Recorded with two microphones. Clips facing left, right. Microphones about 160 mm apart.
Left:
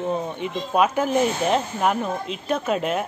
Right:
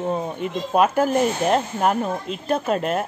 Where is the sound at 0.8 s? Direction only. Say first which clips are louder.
Right 3 dB; 45° right (ahead or behind).